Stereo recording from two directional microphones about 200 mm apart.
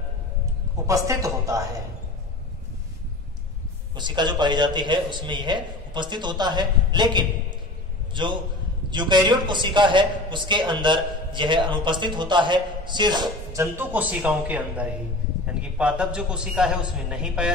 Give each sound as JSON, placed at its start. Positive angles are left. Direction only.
{"t": 0.8, "sound": "speech", "side_deg": -15}
{"t": 3.9, "sound": "a man's voice", "side_deg": -20}